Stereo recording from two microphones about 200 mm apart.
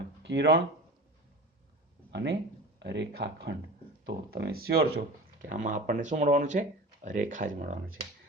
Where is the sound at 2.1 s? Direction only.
55° right (ahead or behind).